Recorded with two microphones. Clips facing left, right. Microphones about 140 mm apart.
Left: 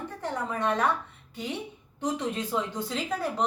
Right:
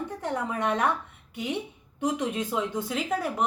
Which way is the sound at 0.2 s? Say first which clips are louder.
Even; 15° right (ahead or behind).